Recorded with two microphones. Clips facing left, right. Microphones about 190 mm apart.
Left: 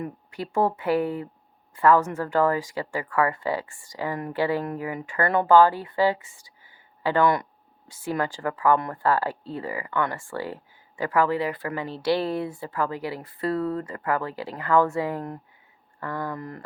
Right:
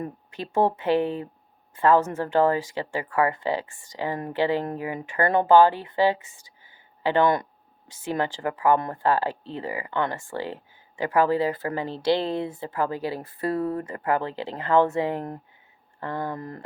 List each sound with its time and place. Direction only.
0.0 s speech: 25° right (ahead or behind)